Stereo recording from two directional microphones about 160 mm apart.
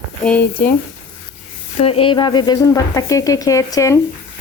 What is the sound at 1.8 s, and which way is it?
Speech, 35° left (ahead or behind).